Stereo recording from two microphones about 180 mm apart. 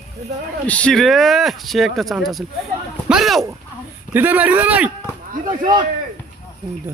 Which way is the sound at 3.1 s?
Centre (ahead or behind).